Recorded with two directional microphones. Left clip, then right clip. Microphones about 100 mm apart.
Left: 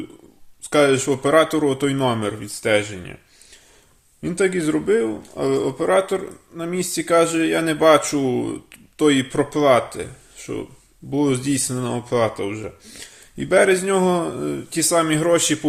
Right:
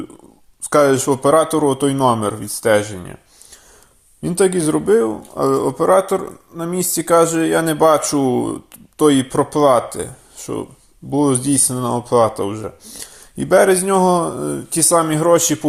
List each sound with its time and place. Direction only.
0.6 s a man's voice: 25° right (ahead or behind)
4.4 s a man's voice: 40° right (ahead or behind)
15.1 s a man's voice: 15° right (ahead or behind)